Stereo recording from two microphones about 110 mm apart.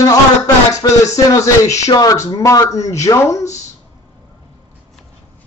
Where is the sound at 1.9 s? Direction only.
35° left (ahead or behind).